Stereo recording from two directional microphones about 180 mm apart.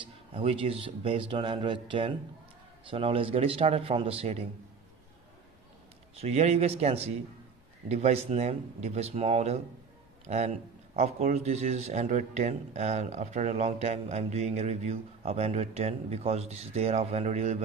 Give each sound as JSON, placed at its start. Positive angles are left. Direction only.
{"t": 0.3, "sound": "speech", "side_deg": -30}
{"t": 6.1, "sound": "a man's voice", "side_deg": -35}